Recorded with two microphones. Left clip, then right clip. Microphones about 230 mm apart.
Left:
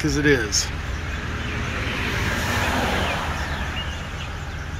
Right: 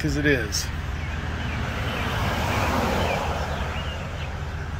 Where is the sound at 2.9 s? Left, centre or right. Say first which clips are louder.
Left 1 dB; right.